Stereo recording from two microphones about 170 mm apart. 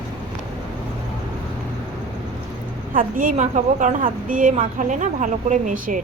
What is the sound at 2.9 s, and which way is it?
A woman's voice, 55° right (ahead or behind).